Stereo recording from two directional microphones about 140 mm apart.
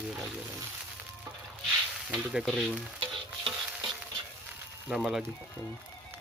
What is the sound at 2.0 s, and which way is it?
Speech, 5° right (ahead or behind).